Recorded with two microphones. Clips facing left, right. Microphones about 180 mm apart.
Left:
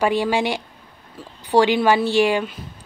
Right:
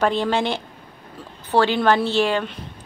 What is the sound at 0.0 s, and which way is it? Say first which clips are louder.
Speech: left 1 dB; 10° left (ahead or behind).